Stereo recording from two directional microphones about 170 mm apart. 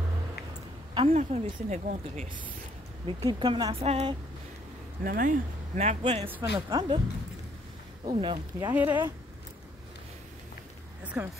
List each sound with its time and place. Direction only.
0.9 s a woman's voice: 35° right (ahead or behind)
3.2 s speech: 25° right (ahead or behind)
5.0 s speech: 55° right (ahead or behind); by 7.0 s 30° right (ahead or behind)
8.0 s speech: 30° right (ahead or behind)
8.5 s speech: 10° right (ahead or behind)
11.2 s speech: 10° right (ahead or behind)